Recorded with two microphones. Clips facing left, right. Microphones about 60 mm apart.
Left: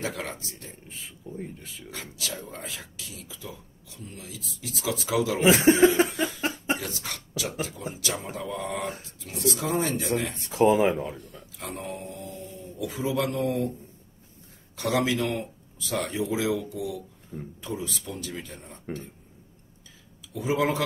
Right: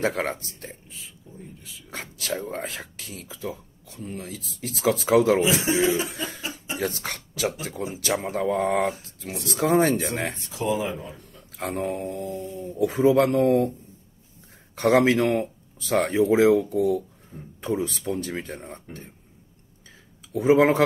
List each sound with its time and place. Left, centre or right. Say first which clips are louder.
0.0 s speech: right 7 dB; right
0.8 s speech: left 4 dB; left
1.9 s speech: right 6 dB; right
5.4 s speech: left 4 dB; left
6.8 s speech: right 7 dB; right
10.5 s speech: left 7 dB; left
10.8 s speech: left 6 dB; left
11.5 s speech: right 8 dB; right
12.3 s speech: right 7 dB; right
12.7 s speech: right 9 dB; right
14.8 s speech: right 7 dB; right
20.5 s speech: right 6 dB; right